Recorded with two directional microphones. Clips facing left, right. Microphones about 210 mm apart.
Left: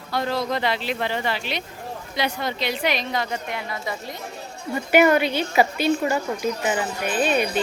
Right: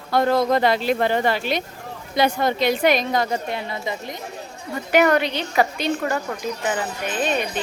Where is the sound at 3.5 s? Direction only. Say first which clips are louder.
Right 2 dB; 30° right (ahead or behind).